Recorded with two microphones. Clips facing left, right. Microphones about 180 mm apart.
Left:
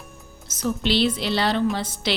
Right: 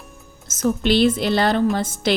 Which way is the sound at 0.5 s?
50° right (ahead or behind).